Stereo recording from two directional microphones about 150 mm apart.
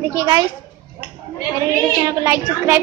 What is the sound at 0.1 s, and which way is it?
Speech, 25° right (ahead or behind).